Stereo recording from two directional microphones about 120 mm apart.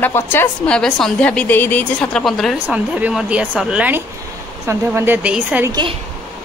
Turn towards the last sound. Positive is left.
turn(degrees=-10)  # may be behind; listen again after turning